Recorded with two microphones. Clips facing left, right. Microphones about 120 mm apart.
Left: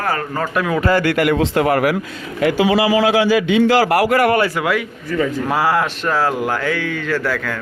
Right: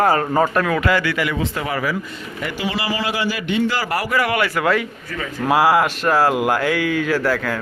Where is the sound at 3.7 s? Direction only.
80° left.